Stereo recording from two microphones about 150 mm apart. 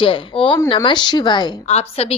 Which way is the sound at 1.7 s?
45° left (ahead or behind).